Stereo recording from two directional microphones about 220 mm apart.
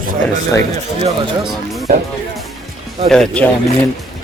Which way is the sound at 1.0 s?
25° right (ahead or behind).